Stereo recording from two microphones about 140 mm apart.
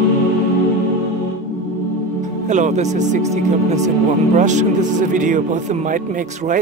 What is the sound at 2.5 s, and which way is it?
Speech, 60° right (ahead or behind).